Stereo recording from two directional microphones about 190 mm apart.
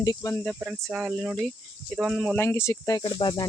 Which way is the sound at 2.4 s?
15° left (ahead or behind).